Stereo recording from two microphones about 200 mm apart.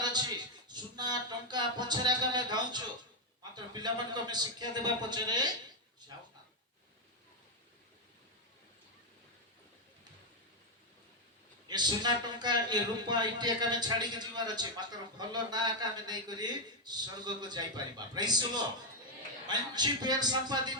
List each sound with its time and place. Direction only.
0.0 s a sound: 20° right (ahead or behind)
3.5 s a man's voice: 20° right (ahead or behind)
11.7 s a man's voice: 20° right (ahead or behind)